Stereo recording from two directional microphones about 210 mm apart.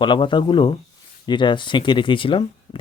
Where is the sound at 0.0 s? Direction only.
20° left (ahead or behind).